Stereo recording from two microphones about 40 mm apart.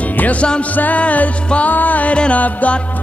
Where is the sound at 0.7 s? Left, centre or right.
Left.